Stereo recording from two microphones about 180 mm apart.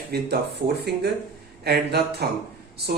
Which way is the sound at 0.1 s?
65° right (ahead or behind).